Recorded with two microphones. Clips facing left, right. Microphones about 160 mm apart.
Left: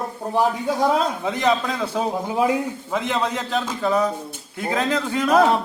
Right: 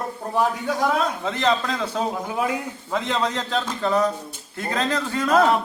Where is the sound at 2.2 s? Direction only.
25° left (ahead or behind).